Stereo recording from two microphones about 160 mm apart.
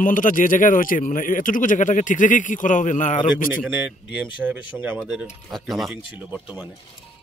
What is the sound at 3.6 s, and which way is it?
Speech, 5° right (ahead or behind).